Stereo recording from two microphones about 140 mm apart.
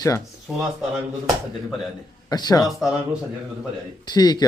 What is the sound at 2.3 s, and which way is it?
Speech, 30° left (ahead or behind).